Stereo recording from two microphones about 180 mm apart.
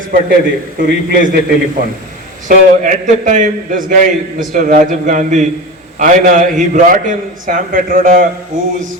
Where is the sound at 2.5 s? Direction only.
45° right (ahead or behind).